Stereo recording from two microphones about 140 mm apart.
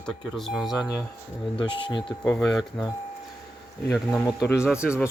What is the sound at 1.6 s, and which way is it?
Speech, 35° left (ahead or behind).